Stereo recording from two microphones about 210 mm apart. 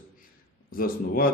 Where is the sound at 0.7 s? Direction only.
45° left (ahead or behind).